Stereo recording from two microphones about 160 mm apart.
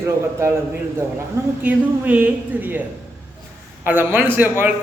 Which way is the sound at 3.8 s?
10° right (ahead or behind).